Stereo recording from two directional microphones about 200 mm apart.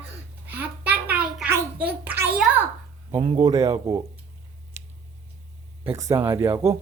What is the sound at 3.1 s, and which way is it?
Speech, 25° right (ahead or behind).